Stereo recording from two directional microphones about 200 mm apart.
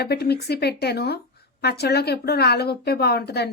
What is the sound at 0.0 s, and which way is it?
Speech, 55° left (ahead or behind).